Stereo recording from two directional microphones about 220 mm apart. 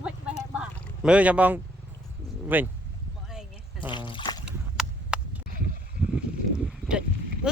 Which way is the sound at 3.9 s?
20° left (ahead or behind).